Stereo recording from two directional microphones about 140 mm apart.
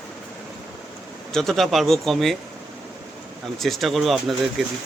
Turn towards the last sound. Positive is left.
turn(degrees=0)  # may be behind; listen again after turning